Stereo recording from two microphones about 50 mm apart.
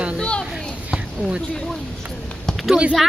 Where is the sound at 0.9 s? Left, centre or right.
Centre.